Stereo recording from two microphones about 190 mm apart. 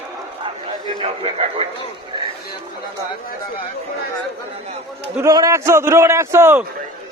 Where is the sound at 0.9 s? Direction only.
30° right (ahead or behind).